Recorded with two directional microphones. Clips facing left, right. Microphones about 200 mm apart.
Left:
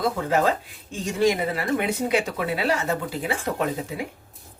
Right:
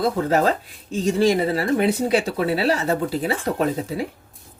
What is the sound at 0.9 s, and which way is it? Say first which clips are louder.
Speech: right 4 dB; 35° right (ahead or behind).